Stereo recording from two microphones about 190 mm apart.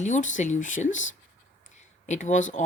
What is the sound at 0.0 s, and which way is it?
A woman's voice, 40° left (ahead or behind).